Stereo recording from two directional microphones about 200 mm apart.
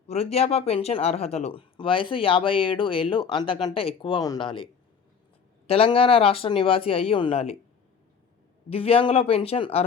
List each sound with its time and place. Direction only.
0.1 s speech: 30° left (ahead or behind)
8.7 s speech: 30° left (ahead or behind)